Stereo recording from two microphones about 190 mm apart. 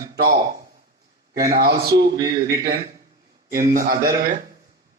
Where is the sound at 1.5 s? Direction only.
50° right (ahead or behind).